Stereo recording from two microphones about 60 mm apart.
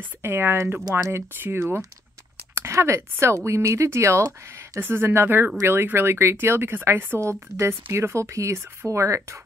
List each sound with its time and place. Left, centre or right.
0.2 s speech: right
4.7 s speech: right